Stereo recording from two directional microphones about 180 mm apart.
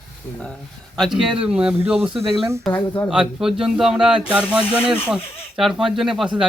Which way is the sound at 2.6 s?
10° left (ahead or behind).